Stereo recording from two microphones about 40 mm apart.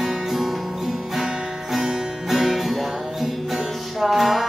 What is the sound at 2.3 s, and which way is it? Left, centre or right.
Music, centre.